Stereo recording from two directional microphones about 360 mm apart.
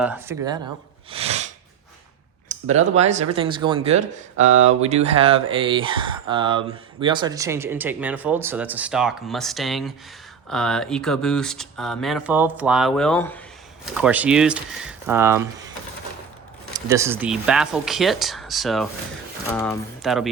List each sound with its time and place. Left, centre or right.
0.0 s speech: centre
1.1 s sneeze: centre
2.5 s speech: centre
16.7 s speech: centre